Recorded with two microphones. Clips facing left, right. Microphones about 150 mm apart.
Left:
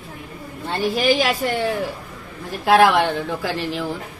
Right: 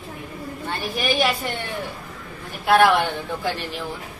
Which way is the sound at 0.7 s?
90° left.